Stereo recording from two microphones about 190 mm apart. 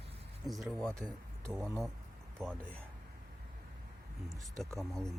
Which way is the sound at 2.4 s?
15° right (ahead or behind).